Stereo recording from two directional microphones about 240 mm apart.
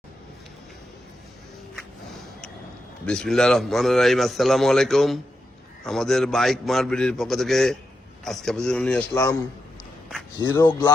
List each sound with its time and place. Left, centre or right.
3.1 s a man's voice: centre
10.5 s speech: centre